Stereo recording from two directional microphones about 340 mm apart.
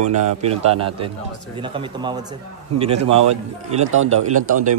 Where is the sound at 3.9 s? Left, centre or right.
Right.